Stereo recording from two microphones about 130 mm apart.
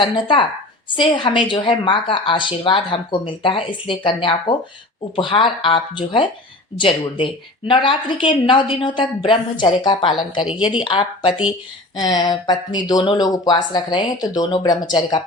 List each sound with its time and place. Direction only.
0.0 s a woman's voice: 40° left (ahead or behind)